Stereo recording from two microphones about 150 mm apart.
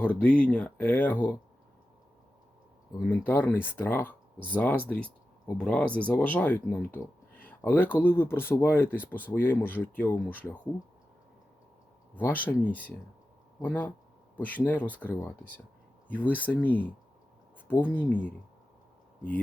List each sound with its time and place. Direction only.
0.0 s speech: 10° left (ahead or behind)
3.1 s speech: 10° left (ahead or behind)
12.2 s speech: 10° left (ahead or behind)